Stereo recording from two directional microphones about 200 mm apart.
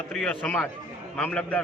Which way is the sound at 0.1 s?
5° left (ahead or behind).